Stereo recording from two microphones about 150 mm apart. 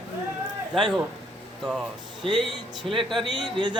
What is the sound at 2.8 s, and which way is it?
Speech, 35° right (ahead or behind).